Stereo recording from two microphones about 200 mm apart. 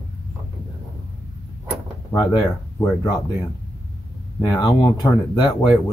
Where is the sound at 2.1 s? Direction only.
20° left (ahead or behind).